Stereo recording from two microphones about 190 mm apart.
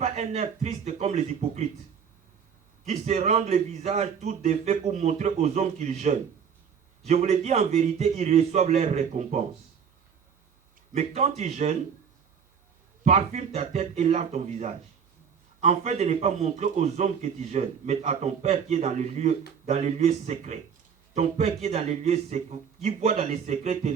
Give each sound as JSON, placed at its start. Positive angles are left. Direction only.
{"t": 0.0, "sound": "a man's voice", "side_deg": -35}
{"t": 2.8, "sound": "a man's voice", "side_deg": -35}
{"t": 10.9, "sound": "a man's voice", "side_deg": -35}
{"t": 13.1, "sound": "a man's voice", "side_deg": -35}